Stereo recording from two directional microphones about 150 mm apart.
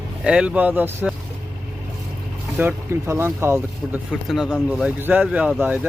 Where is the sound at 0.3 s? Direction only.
5° right (ahead or behind).